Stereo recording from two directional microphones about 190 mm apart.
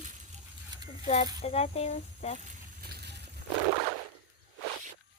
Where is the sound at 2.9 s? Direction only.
60° right (ahead or behind).